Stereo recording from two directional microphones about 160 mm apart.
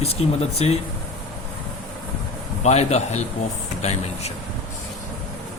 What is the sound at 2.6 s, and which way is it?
A man's voice, 45° left (ahead or behind).